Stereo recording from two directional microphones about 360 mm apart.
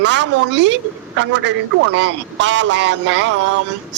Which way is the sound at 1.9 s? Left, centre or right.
Right.